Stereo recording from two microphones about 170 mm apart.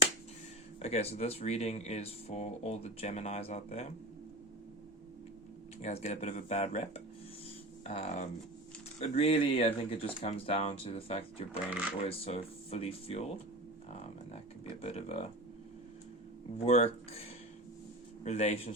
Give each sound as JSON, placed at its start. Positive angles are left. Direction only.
{"t": 0.8, "sound": "speech", "side_deg": 40}
{"t": 5.8, "sound": "speech", "side_deg": 40}
{"t": 16.6, "sound": "speech", "side_deg": 35}